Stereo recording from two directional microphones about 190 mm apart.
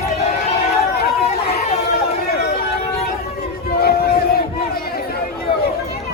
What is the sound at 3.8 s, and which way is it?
Crowd, 55° left (ahead or behind).